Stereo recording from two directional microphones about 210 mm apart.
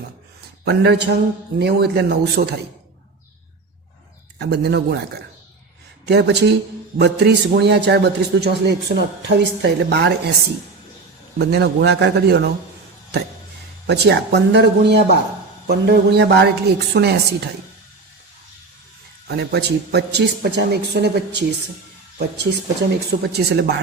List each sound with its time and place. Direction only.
0.6 s a man's voice: 50° right (ahead or behind)
4.4 s a man's voice: 50° right (ahead or behind)
6.1 s a man's voice: 55° right (ahead or behind)
11.3 s a man's voice: 50° right (ahead or behind)
13.8 s a man's voice: 55° right (ahead or behind)
19.3 s a man's voice: 50° right (ahead or behind)
22.2 s a man's voice: 55° right (ahead or behind)